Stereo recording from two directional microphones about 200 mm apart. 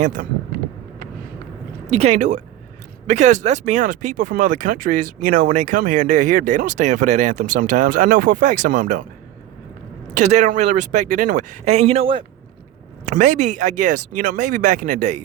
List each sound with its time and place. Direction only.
0.2 s speech: 40° right (ahead or behind)
1.9 s speech: 35° right (ahead or behind)
10.2 s speech: 35° right (ahead or behind)
13.1 s speech: 40° right (ahead or behind)